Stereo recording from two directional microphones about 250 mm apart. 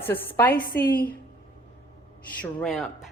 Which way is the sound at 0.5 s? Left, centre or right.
Left.